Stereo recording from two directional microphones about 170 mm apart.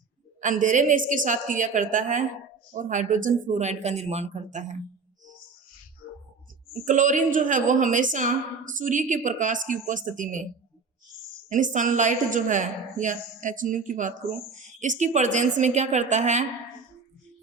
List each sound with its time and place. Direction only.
0.4 s a woman's voice: 50° right (ahead or behind)
6.8 s a woman's voice: 50° right (ahead or behind)
11.4 s a woman's voice: 45° right (ahead or behind)